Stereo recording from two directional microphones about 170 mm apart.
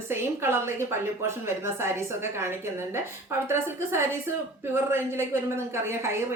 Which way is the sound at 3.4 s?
15° right (ahead or behind).